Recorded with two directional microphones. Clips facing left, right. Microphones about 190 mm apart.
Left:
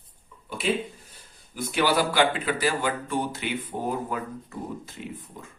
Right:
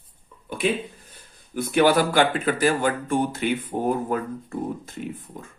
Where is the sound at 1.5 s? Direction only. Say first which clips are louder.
Right 5 dB; 55° right (ahead or behind).